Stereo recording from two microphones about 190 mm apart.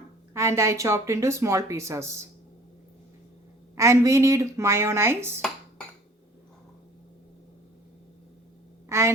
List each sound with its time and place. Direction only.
0.3 s speech: 15° right (ahead or behind)
3.8 s speech: 15° right (ahead or behind)
8.9 s speech: 15° right (ahead or behind)